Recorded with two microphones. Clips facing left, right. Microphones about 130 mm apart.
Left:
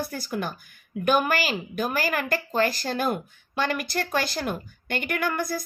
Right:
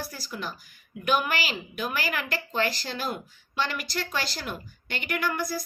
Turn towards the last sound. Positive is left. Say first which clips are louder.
# left 2 dB
turn(degrees=50)  # may be behind; listen again after turning